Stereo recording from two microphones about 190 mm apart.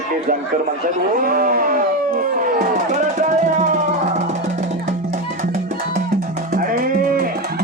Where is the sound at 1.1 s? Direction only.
50° right (ahead or behind).